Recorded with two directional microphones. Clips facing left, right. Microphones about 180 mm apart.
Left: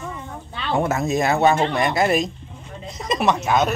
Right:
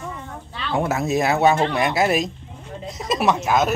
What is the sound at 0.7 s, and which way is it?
Speech, 5° right (ahead or behind).